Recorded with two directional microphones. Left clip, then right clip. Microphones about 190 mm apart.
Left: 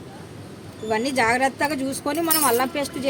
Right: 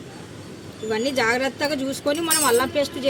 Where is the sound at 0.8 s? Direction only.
25° left (ahead or behind).